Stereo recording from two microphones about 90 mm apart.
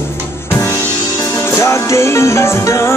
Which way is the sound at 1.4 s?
30° left (ahead or behind).